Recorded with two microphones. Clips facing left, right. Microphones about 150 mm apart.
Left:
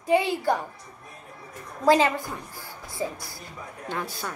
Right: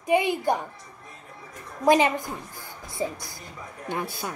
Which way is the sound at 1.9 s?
20° right (ahead or behind).